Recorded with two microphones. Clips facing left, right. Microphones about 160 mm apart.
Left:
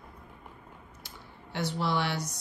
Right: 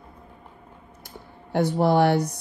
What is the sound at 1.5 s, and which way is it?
Speech, 60° right (ahead or behind).